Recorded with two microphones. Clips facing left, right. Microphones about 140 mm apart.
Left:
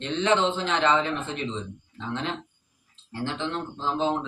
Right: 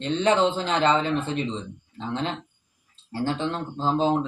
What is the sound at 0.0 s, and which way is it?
Speech, 35° right (ahead or behind).